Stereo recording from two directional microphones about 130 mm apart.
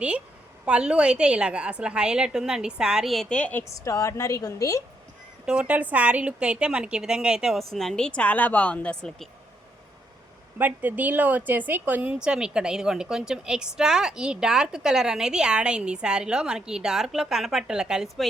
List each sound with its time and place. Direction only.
0.6 s a woman's voice: 10° right (ahead or behind); by 3.6 s 10° left (ahead or behind)
3.6 s a woman's voice: 25° left (ahead or behind)
5.5 s a woman's voice: 10° right (ahead or behind)
10.6 s a woman's voice: 15° right (ahead or behind)